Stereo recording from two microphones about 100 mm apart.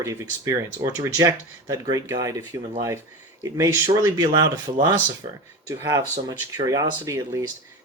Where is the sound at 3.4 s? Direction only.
35° right (ahead or behind).